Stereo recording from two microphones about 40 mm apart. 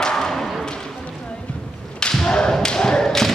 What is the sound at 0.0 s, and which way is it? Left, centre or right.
Thump, centre.